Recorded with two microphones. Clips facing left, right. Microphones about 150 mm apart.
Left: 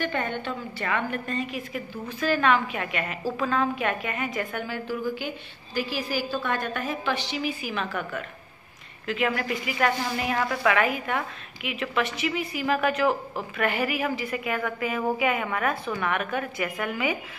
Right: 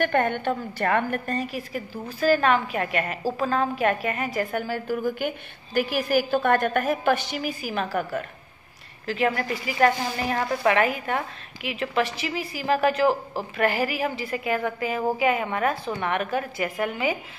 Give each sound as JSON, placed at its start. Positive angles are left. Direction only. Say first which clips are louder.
{"t": 0.0, "sound": "a woman's voice", "louder": "right 6 dB", "side_deg": -55}